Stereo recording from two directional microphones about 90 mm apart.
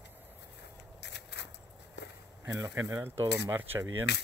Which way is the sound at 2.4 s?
25° right (ahead or behind).